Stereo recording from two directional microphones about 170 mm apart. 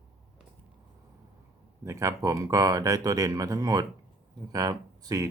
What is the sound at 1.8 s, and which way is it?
Speech, 20° right (ahead or behind).